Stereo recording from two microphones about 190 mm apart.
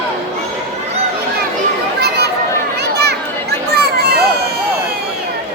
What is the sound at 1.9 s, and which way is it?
Chatter, 55° right (ahead or behind).